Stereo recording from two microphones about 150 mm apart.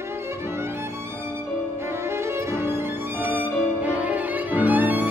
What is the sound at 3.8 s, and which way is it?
Violin, 10° right (ahead or behind).